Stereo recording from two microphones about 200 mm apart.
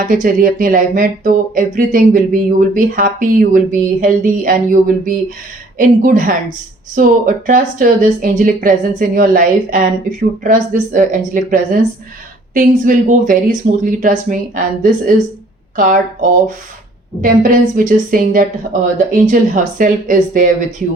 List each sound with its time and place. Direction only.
0.1 s speech: 40° right (ahead or behind)